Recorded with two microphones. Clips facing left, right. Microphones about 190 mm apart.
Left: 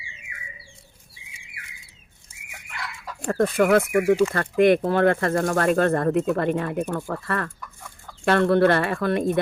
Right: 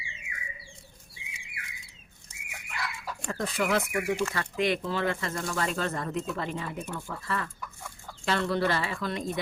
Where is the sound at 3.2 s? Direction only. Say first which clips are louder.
Left 10 dB; 55° left (ahead or behind).